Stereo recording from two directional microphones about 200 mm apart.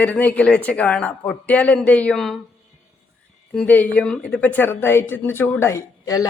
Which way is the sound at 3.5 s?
5° left (ahead or behind).